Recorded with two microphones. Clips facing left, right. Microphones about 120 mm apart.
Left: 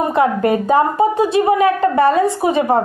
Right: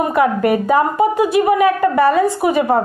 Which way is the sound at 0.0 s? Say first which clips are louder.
Even; 25° left (ahead or behind).